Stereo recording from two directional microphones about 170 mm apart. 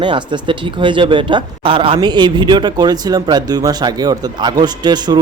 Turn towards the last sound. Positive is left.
turn(degrees=-25)  # may be behind; listen again after turning